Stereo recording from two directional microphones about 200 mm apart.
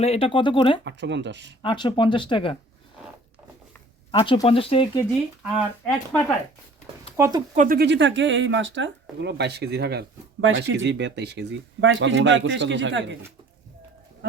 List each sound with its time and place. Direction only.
0.0 s speech: 30° left (ahead or behind)
0.9 s speech: 60° right (ahead or behind)
1.6 s speech: 25° left (ahead or behind)
4.1 s speech: 25° left (ahead or behind)
5.8 s speech: 5° left (ahead or behind)
7.2 s speech: 20° right (ahead or behind)
7.5 s speech: 45° right (ahead or behind); by 13.1 s 65° right (ahead or behind)